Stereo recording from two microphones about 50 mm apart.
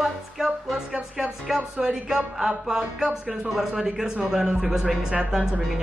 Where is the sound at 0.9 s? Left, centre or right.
Centre.